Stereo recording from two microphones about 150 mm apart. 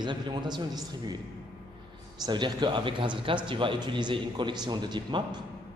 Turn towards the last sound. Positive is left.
turn(degrees=-30)  # may be behind; listen again after turning